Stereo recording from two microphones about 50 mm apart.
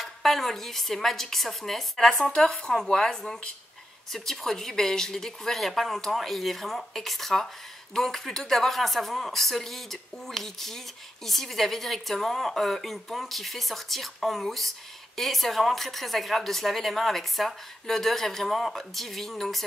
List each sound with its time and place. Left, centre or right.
0.0 s a woman's voice: centre